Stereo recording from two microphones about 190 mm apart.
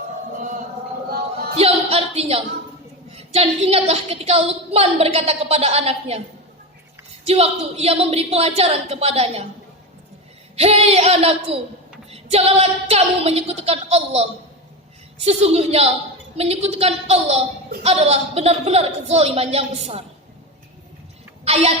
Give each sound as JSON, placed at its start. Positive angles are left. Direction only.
{"t": 1.5, "sound": "a woman's voice", "side_deg": -35}
{"t": 7.3, "sound": "a woman's voice", "side_deg": -30}
{"t": 10.5, "sound": "a woman's voice", "side_deg": -35}
{"t": 21.4, "sound": "a sound", "side_deg": -30}